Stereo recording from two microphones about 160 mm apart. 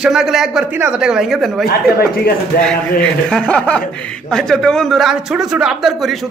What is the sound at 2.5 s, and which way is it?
Speech, 70° left (ahead or behind).